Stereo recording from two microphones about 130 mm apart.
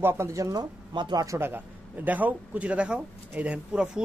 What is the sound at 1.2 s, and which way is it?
A man's voice, 20° right (ahead or behind).